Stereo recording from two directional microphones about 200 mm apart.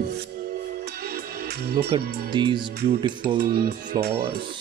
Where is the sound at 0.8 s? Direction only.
50° right (ahead or behind).